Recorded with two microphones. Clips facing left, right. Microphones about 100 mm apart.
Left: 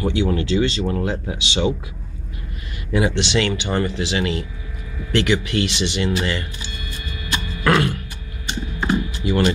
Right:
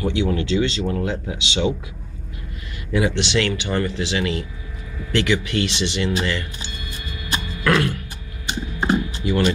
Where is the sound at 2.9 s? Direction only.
20° left (ahead or behind).